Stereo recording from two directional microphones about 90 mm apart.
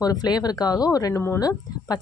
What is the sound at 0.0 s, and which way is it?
A woman's voice, 45° left (ahead or behind).